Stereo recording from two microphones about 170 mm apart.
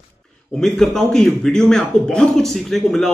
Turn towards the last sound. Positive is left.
turn(degrees=0)  # may be behind; listen again after turning